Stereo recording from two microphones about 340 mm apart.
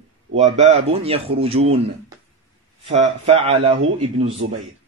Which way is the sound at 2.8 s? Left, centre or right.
Centre.